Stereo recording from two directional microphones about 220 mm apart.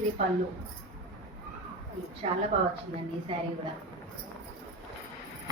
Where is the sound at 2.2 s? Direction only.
30° right (ahead or behind).